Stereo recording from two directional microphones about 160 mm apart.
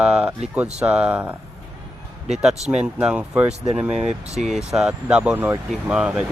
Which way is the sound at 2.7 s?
5° right (ahead or behind).